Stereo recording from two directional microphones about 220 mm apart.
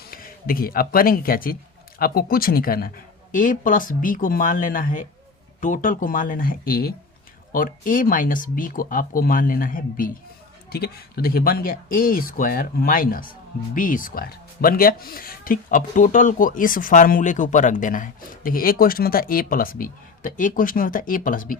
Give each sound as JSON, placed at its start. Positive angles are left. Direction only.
{"t": 0.0, "sound": "speech", "side_deg": 40}